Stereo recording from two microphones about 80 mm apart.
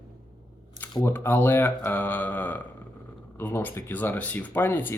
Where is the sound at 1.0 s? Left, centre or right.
Left.